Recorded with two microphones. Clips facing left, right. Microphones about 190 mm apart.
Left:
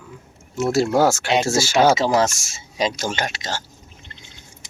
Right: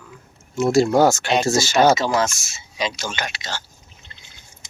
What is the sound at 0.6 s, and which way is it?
Speech, 5° left (ahead or behind).